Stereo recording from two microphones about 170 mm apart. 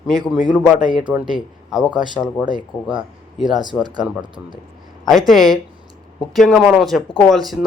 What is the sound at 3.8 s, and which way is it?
Speech, 25° right (ahead or behind).